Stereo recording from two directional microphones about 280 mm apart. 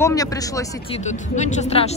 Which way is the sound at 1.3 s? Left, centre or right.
Left.